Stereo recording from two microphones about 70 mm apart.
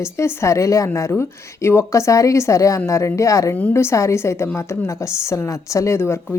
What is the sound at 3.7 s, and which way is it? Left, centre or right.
A woman's voice, left.